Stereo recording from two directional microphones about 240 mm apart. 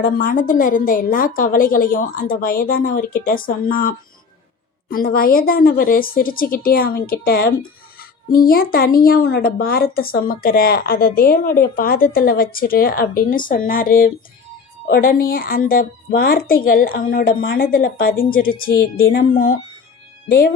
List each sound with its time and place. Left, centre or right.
0.0 s a woman's voice: left